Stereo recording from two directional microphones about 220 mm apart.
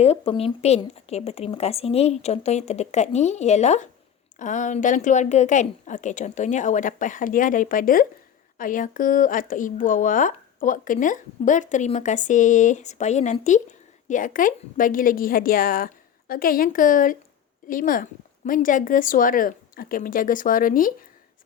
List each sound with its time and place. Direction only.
0.0 s speech: 25° left (ahead or behind)